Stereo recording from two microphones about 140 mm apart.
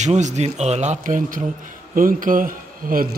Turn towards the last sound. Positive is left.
turn(degrees=-90)